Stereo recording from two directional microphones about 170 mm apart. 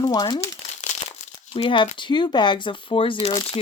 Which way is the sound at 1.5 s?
30° left (ahead or behind).